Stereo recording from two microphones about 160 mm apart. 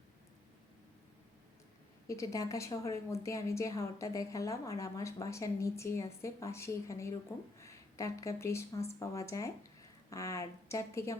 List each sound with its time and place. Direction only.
2.0 s a woman's voice: 20° left (ahead or behind)